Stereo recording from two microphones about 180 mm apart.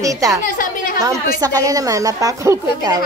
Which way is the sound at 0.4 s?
50° left (ahead or behind).